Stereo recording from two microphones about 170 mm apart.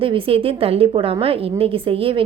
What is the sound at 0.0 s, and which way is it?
A woman's voice, 35° right (ahead or behind).